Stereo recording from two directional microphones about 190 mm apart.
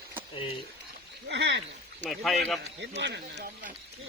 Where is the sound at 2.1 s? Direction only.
Centre (ahead or behind).